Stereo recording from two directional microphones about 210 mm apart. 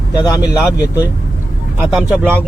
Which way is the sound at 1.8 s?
5° right (ahead or behind).